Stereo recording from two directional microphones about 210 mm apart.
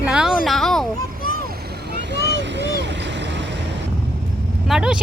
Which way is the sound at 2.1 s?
55° right (ahead or behind).